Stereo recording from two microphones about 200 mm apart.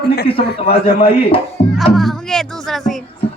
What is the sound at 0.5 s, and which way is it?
Speech, 50° left (ahead or behind).